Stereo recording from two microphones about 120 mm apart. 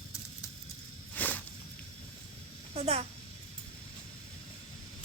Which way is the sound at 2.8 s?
60° right (ahead or behind).